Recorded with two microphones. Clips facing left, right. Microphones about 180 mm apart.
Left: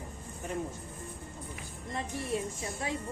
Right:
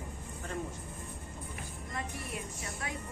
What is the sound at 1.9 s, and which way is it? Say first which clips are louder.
Speech: left 6 dB; 30° left (ahead or behind).